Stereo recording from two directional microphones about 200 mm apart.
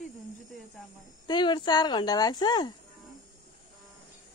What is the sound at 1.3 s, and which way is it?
Speech, 20° left (ahead or behind).